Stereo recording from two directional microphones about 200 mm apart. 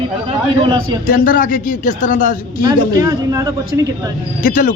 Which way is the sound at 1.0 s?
45° left (ahead or behind).